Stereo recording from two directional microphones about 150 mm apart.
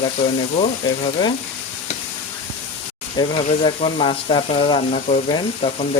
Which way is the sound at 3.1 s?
35° left (ahead or behind).